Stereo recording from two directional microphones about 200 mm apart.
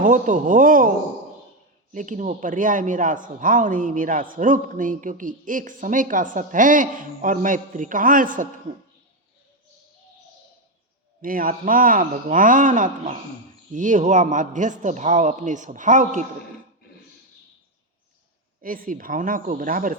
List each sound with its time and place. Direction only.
0.0 s a man's voice: 40° right (ahead or behind)
1.9 s a man's voice: 40° right (ahead or behind)
11.2 s a man's voice: 45° right (ahead or behind)
18.6 s speech: 45° right (ahead or behind)